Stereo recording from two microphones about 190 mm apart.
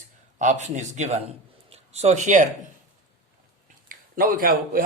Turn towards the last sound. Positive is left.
turn(degrees=-50)  # may be behind; listen again after turning